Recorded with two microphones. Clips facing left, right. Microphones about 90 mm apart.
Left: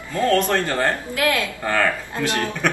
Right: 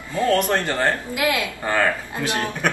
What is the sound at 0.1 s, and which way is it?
A woman's voice, 15° right (ahead or behind).